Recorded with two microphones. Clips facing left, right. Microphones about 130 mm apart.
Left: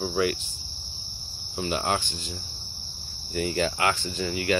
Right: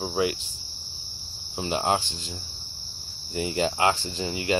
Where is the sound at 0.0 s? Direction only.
25° right (ahead or behind).